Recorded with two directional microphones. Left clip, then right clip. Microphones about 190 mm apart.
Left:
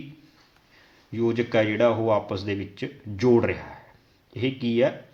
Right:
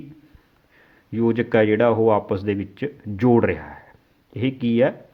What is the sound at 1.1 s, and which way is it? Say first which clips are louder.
Speech: right 4 dB; 45° right (ahead or behind).